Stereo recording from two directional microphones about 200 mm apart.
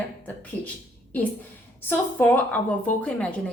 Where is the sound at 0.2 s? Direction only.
10° left (ahead or behind).